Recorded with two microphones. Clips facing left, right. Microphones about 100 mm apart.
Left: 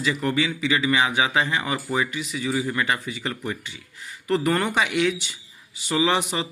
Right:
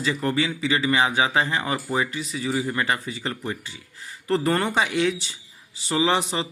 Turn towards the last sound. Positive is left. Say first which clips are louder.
# even
turn(degrees=-30)  # may be behind; listen again after turning